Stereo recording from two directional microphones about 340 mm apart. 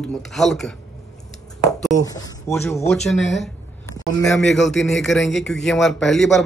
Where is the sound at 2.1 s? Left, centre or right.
Centre.